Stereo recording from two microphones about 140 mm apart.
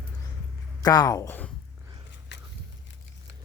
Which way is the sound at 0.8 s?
25° left (ahead or behind).